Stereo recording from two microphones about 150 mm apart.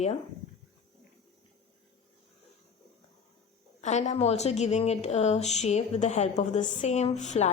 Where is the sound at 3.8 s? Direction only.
50° left (ahead or behind).